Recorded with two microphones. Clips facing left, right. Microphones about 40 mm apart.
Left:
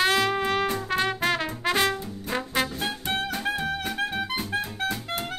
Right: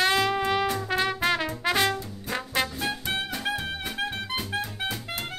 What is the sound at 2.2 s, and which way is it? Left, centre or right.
Brass instrument, centre.